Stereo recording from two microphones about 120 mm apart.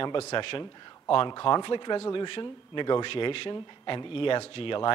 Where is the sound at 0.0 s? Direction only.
50° left (ahead or behind).